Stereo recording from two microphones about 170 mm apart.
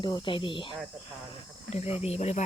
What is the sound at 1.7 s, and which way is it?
Speech, 40° left (ahead or behind).